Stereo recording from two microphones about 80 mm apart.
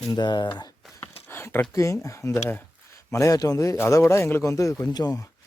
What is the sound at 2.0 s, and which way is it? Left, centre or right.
A man's voice, left.